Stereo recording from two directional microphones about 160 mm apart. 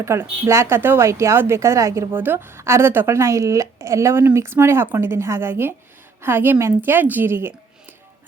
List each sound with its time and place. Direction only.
0.0 s a woman's voice: 15° right (ahead or behind)